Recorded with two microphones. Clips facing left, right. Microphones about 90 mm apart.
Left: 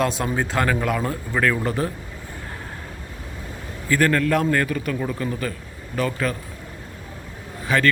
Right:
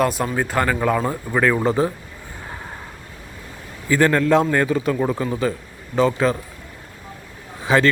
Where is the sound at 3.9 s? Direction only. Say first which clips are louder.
Right 3 dB; 15° right (ahead or behind).